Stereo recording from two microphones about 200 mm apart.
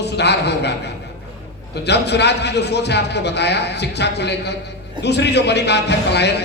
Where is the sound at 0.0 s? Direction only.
55° left (ahead or behind).